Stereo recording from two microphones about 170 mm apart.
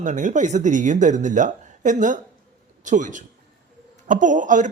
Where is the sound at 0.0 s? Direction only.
50° right (ahead or behind).